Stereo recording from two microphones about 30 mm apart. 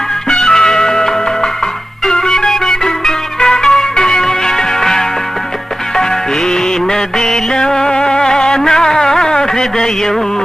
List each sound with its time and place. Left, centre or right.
0.3 s music: left
7.2 s music: left